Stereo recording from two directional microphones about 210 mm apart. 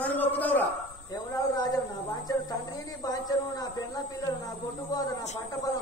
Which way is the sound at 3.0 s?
15° left (ahead or behind).